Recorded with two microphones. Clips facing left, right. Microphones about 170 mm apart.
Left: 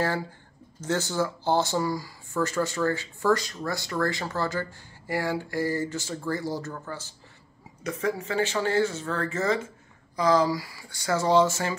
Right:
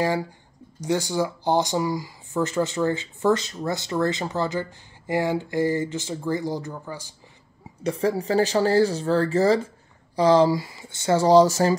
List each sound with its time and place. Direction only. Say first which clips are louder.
0.7 s speech: right 3 dB; 15° right (ahead or behind)
7.8 s speech: right 5 dB; 30° right (ahead or behind)